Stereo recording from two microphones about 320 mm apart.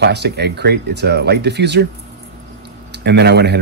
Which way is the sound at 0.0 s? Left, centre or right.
Right.